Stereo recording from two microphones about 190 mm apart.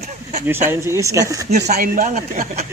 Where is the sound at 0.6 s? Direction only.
15° right (ahead or behind).